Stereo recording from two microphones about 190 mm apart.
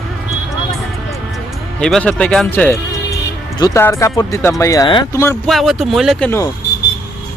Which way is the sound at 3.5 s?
15° left (ahead or behind).